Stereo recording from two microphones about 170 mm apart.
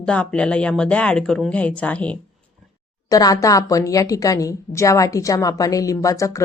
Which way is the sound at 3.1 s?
20° left (ahead or behind).